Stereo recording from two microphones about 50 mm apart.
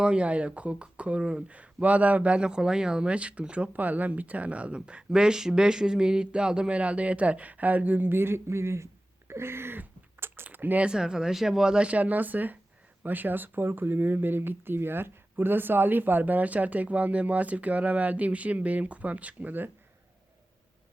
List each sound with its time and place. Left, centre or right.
0.0 s speech: right
10.8 s speech: centre; by 19.7 s right